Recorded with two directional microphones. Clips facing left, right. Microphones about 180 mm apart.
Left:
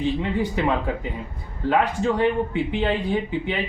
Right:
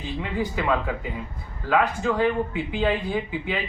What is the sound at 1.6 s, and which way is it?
Speech, 25° left (ahead or behind).